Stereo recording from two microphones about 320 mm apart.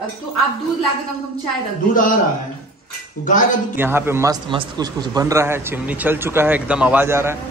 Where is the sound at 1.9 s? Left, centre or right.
Left.